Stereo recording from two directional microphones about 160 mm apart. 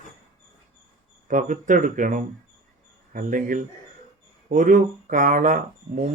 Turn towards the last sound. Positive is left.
turn(degrees=-55)  # may be behind; listen again after turning